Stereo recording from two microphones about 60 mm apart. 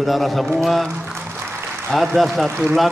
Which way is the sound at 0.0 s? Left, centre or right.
Centre.